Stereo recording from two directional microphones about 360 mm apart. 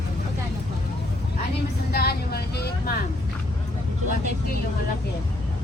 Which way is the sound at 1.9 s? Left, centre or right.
Left.